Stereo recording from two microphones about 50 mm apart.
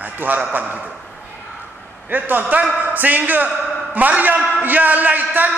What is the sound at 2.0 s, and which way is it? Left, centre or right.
A man's voice, right.